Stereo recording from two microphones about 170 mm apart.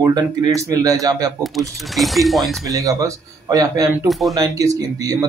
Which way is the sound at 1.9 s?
Centre (ahead or behind).